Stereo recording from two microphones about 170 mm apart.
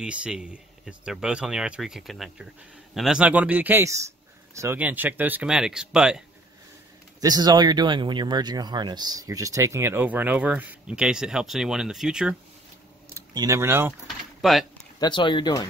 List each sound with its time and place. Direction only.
0.0 s speech: 5° right (ahead or behind)
7.2 s speech: 20° right (ahead or behind); by 12.4 s 5° right (ahead or behind)
13.1 s speech: 20° right (ahead or behind)
14.0 s a sound: centre (ahead or behind)
15.0 s speech: 25° left (ahead or behind)